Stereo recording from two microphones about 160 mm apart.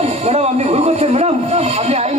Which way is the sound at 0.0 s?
40° right (ahead or behind).